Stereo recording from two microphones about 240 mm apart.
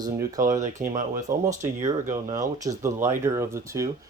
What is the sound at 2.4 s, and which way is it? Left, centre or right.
Speech, centre.